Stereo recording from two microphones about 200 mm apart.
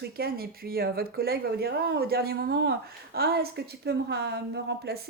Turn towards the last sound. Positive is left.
turn(degrees=-55)  # may be behind; listen again after turning